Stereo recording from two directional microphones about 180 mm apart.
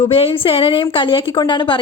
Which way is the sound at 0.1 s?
30° left (ahead or behind).